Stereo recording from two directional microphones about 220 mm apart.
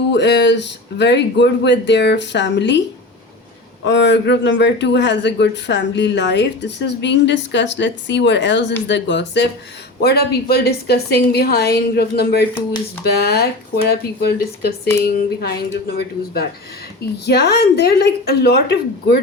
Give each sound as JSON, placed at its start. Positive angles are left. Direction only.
{"t": 0.1, "sound": "a man's voice", "side_deg": 50}
{"t": 3.8, "sound": "a man's voice", "side_deg": 50}